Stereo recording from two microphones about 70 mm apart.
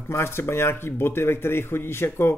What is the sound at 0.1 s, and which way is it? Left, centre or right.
A man's voice, left.